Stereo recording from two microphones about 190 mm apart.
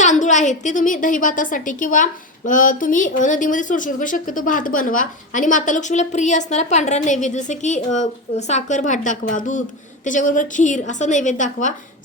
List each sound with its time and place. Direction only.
0.0 s a woman's voice: 40° left (ahead or behind)